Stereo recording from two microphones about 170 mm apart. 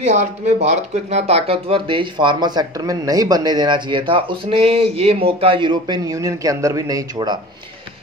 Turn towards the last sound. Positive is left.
turn(degrees=-25)  # may be behind; listen again after turning